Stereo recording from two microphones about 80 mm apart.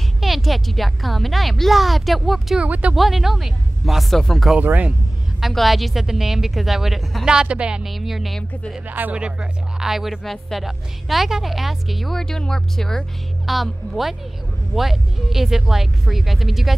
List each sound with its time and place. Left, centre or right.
0.2 s speech: centre
2.6 s speech: centre
3.0 s speech: centre
4.6 s speech: right
5.4 s speech: centre
7.2 s speech: centre
7.9 s speech: centre
8.8 s speech: right; by 16.7 s centre